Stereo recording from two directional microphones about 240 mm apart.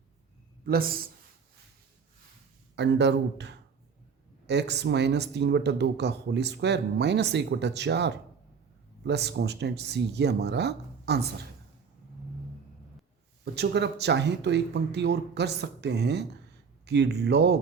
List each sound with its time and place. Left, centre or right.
0.6 s speech: right
2.7 s speech: right
13.4 s speech: right